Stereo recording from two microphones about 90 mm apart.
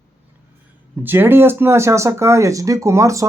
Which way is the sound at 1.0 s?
25° right (ahead or behind).